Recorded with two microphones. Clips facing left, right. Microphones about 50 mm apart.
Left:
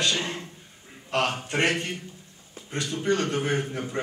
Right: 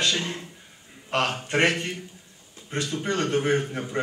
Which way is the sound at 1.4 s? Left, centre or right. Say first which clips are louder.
Right 3 dB; right.